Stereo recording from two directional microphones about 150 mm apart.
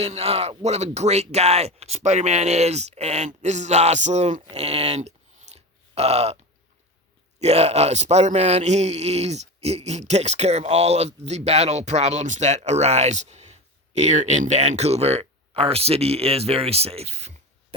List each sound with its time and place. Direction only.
0.0 s a man's voice: 40° right (ahead or behind)
4.5 s a sound: 45° right (ahead or behind)
7.3 s a man's voice: 45° right (ahead or behind)